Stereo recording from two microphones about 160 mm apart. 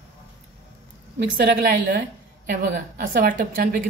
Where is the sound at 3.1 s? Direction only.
60° right (ahead or behind).